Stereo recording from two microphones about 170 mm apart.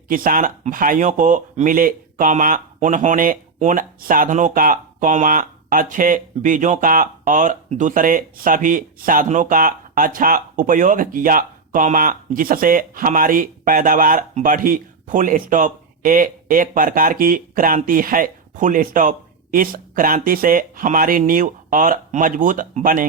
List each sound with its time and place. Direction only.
0.1 s speech: 55° right (ahead or behind)